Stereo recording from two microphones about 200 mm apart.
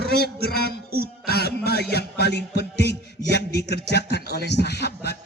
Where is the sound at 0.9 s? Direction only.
50° right (ahead or behind).